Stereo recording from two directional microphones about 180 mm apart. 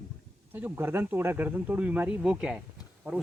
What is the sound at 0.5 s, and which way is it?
Speech, 10° right (ahead or behind).